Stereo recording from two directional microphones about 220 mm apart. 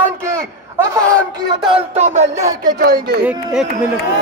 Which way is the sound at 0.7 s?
15° right (ahead or behind).